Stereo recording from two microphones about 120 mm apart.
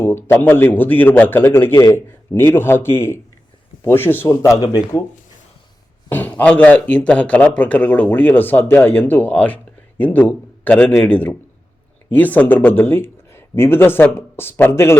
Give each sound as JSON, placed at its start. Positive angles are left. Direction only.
{"t": 0.0, "sound": "speech", "side_deg": 20}
{"t": 2.3, "sound": "speech", "side_deg": 20}
{"t": 6.1, "sound": "speech", "side_deg": 15}